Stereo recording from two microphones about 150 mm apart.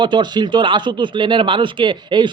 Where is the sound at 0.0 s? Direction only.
30° right (ahead or behind).